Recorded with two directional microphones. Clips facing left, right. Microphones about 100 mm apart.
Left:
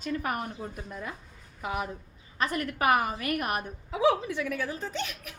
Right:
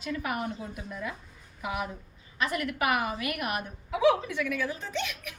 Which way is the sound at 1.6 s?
35° left (ahead or behind).